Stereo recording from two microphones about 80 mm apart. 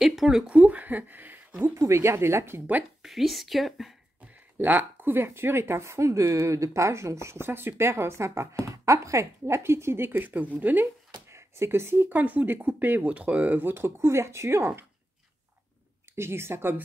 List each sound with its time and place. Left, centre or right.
0.0 s speech: centre; by 1.7 s right
1.8 s speech: right
3.0 s speech: centre
4.3 s speech: right
11.2 s speech: right
12.1 s speech: right
16.2 s speech: right